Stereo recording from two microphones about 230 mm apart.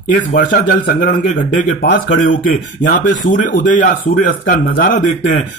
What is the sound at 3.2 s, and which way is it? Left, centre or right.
A man's voice, left.